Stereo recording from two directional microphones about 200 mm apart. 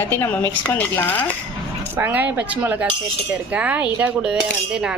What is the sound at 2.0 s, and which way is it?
A woman's voice, 10° right (ahead or behind).